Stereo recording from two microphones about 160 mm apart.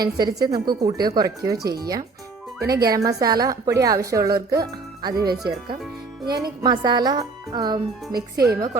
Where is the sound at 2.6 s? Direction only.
80° right.